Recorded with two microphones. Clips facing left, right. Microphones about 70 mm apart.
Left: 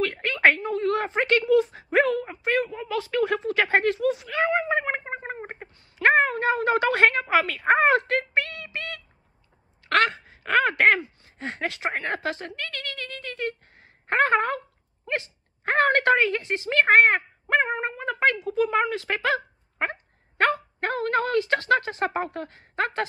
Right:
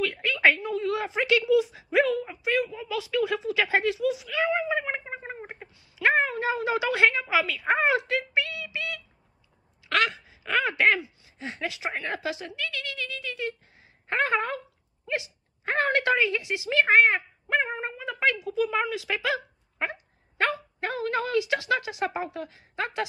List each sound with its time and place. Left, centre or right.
0.0 s speech: left
5.8 s a woman's voice: left